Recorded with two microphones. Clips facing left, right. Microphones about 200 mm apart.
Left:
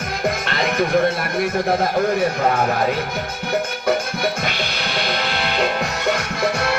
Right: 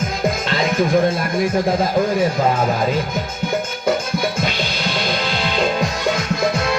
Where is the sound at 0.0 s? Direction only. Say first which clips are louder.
Right 2 dB; 65° left (ahead or behind).